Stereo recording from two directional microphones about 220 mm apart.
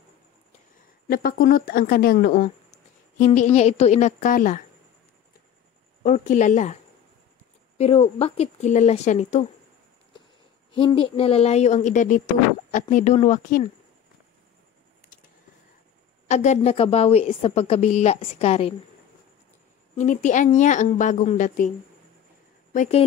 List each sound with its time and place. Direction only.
1.0 s speech: 45° left (ahead or behind)
6.0 s a woman's voice: 35° left (ahead or behind)
10.7 s a woman's voice: 20° left (ahead or behind)
16.3 s a woman's voice: 30° left (ahead or behind)
20.0 s speech: 35° left (ahead or behind)